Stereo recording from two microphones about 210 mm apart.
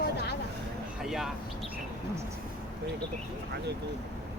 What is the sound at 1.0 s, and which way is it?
Speech, centre (ahead or behind).